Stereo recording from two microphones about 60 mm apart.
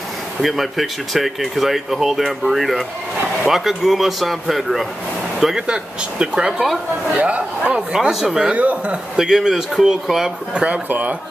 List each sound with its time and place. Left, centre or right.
0.4 s speech: centre; by 7.7 s right
7.7 s speech: centre
8.5 s speech: right
9.1 s speech: centre
10.5 s speech: right